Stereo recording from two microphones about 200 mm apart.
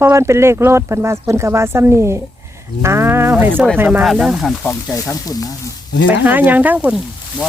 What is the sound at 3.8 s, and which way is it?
Speech, 10° right (ahead or behind).